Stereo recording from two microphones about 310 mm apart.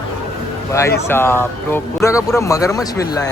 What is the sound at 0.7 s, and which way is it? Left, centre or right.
Speech, centre.